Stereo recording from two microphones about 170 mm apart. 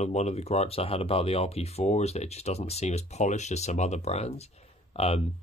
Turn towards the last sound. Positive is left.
turn(degrees=35)  # may be behind; listen again after turning